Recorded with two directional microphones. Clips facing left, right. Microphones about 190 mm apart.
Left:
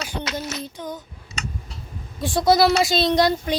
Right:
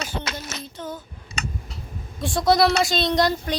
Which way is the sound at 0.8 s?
15° left (ahead or behind).